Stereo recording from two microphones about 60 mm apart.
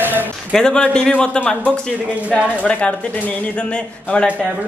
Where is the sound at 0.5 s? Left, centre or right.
Centre.